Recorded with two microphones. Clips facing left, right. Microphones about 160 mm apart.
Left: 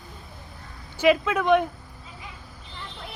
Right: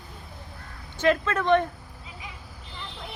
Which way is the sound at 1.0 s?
10° left (ahead or behind).